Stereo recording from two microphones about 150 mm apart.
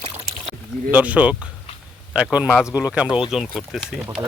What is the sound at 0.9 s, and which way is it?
Speech, 10° right (ahead or behind).